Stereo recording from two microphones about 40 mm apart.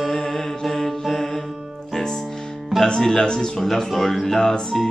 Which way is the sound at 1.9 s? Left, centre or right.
Centre.